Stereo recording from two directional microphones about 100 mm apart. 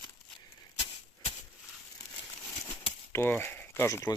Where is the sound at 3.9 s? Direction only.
30° left (ahead or behind).